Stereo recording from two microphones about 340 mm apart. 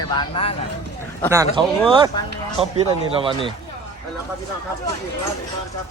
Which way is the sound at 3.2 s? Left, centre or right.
Centre.